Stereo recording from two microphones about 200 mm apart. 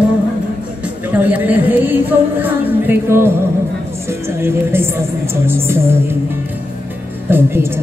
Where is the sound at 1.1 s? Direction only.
10° right (ahead or behind).